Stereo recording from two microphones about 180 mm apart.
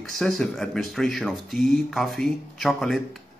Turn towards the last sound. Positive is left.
turn(degrees=0)  # may be behind; listen again after turning